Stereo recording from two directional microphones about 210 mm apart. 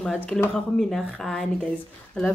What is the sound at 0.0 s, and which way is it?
Speech, 5° left (ahead or behind).